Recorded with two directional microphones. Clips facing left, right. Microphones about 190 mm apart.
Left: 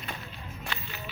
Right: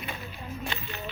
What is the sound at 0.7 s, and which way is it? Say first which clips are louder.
Music: right 2 dB; 20° right (ahead or behind).